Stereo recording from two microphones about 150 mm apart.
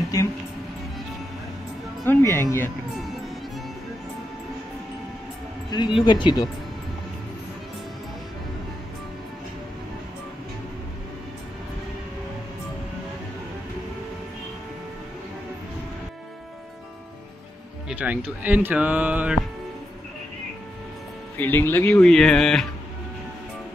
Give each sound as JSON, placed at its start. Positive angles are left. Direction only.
{"t": 2.0, "sound": "speech", "side_deg": 15}
{"t": 5.7, "sound": "speech", "side_deg": 30}
{"t": 17.8, "sound": "speech", "side_deg": -10}
{"t": 21.4, "sound": "speech", "side_deg": 15}